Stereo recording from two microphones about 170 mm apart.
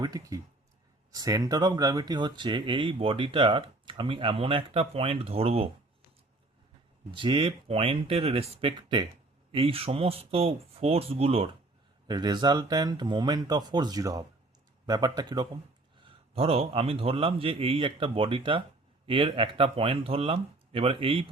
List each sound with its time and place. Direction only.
0.0 s speech: 20° right (ahead or behind)
7.1 s a man's voice: 30° right (ahead or behind)
12.0 s a man's voice: 25° right (ahead or behind)